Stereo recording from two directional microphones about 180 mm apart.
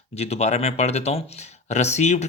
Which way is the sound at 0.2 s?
35° left (ahead or behind).